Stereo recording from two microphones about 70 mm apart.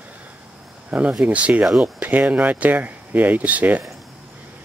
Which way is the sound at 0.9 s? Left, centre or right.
Centre.